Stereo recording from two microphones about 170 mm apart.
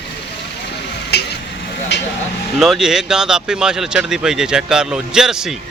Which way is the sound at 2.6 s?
Centre (ahead or behind).